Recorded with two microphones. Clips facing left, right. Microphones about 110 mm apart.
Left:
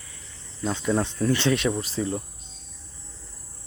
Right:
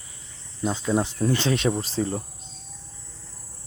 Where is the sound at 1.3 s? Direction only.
25° right (ahead or behind).